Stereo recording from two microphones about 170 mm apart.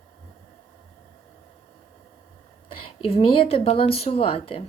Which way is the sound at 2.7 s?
35° left (ahead or behind).